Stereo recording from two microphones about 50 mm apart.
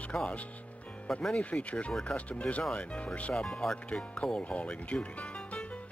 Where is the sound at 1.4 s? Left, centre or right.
Left.